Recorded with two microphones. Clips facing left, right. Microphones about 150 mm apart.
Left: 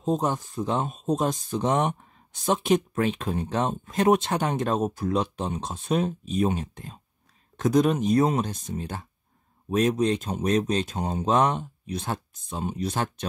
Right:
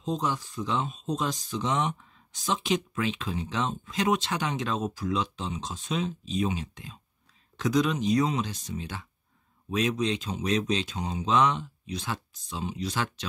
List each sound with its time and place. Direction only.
0.0 s speech: 50° left (ahead or behind)